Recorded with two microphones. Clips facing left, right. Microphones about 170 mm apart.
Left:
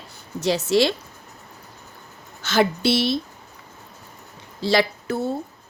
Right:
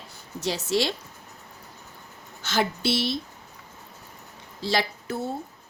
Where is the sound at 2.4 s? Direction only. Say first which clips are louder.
Left 6 dB; 75° left (ahead or behind).